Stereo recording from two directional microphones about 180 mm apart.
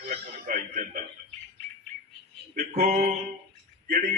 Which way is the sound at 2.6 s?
50° right (ahead or behind).